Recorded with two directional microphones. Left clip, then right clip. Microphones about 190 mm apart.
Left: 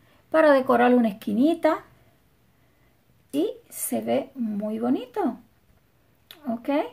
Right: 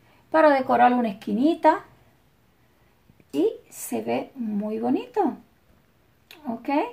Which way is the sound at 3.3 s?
35° left (ahead or behind).